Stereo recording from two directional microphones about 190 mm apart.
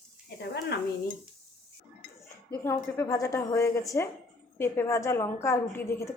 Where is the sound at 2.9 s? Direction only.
15° left (ahead or behind).